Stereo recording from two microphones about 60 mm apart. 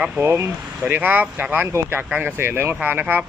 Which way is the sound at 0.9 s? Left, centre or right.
Right.